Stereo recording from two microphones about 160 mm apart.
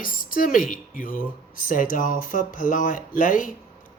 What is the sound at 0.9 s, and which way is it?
A woman's voice, 60° left (ahead or behind).